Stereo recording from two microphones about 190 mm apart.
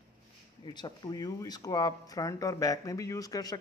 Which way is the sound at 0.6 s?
20° left (ahead or behind).